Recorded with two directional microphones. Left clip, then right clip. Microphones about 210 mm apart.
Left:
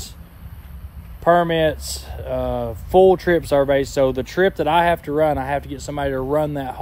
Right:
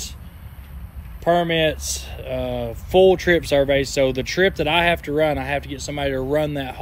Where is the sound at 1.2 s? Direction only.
15° left (ahead or behind).